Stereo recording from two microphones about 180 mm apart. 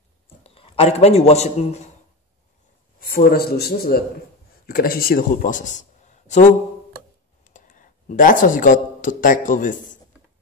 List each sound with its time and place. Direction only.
0.4 s a man's voice: 30° left (ahead or behind)
3.0 s a man's voice: 55° left (ahead or behind)
7.4 s a sound: 45° left (ahead or behind)